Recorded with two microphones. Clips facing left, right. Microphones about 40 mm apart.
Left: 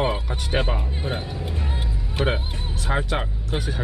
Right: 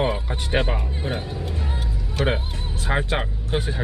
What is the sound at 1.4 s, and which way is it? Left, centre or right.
Vehicle, centre.